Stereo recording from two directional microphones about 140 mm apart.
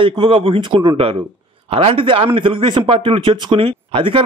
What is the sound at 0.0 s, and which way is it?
A man's voice, 35° right (ahead or behind).